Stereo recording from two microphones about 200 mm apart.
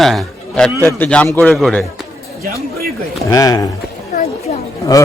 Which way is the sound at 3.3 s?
15° left (ahead or behind).